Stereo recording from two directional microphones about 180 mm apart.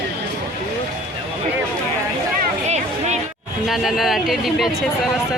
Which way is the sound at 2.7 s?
40° right (ahead or behind).